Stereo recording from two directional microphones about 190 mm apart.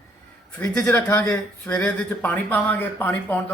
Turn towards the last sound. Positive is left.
turn(degrees=10)  # may be behind; listen again after turning